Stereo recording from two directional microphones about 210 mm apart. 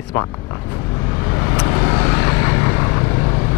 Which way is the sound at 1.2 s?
20° left (ahead or behind).